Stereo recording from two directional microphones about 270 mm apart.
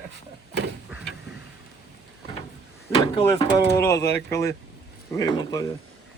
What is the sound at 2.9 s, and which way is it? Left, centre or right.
Speech, centre.